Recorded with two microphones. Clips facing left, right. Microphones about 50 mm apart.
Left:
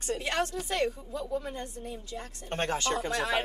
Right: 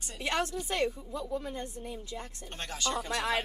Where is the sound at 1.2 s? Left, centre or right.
Centre.